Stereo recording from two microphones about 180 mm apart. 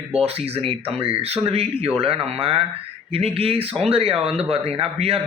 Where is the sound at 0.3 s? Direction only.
35° right (ahead or behind).